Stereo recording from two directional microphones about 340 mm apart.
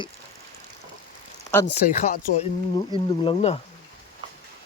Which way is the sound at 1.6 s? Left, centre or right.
Left.